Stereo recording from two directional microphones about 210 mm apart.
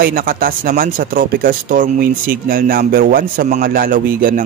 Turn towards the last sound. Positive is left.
turn(degrees=-45)  # may be behind; listen again after turning